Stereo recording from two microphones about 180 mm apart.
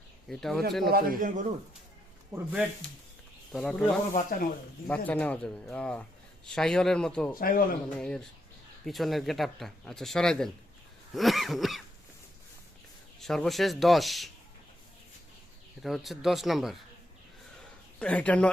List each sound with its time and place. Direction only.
0.3 s a man's voice: centre (ahead or behind)
0.9 s a man's voice: 55° right (ahead or behind)
2.3 s a man's voice: 5° right (ahead or behind)
4.1 s speech: 50° left (ahead or behind)
4.9 s a man's voice: 10° left (ahead or behind)
7.3 s speech: 50° left (ahead or behind)
7.9 s a man's voice: 5° left (ahead or behind)
13.1 s a man's voice: centre (ahead or behind)
15.8 s a man's voice: centre (ahead or behind)
18.0 s speech: 5° left (ahead or behind)